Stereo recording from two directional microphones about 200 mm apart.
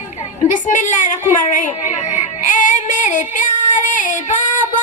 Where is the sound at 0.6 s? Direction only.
40° left (ahead or behind).